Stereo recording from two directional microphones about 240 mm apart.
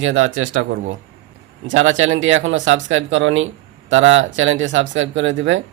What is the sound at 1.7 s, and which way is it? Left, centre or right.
Speech, right.